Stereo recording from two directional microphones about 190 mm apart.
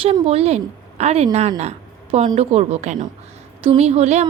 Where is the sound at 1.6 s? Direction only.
35° right (ahead or behind).